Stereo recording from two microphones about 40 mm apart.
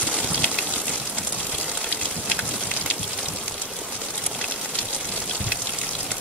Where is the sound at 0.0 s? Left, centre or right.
Right.